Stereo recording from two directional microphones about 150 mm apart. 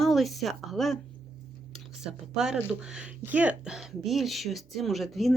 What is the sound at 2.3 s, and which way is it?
Speech, 5° right (ahead or behind).